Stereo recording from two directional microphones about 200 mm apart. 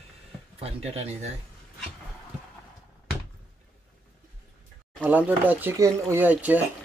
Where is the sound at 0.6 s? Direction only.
30° right (ahead or behind).